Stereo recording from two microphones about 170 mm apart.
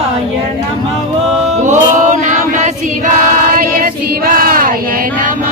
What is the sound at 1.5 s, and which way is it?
Choir, 45° right (ahead or behind).